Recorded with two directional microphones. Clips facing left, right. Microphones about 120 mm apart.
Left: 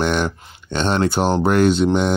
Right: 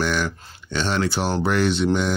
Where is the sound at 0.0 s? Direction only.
55° left (ahead or behind).